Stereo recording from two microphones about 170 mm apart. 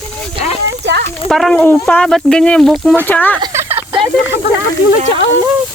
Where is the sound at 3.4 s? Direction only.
15° right (ahead or behind).